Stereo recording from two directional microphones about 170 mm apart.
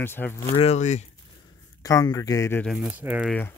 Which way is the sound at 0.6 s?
40° left (ahead or behind).